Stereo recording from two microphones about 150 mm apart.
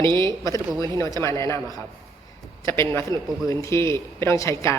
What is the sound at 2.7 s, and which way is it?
Speech, 20° left (ahead or behind).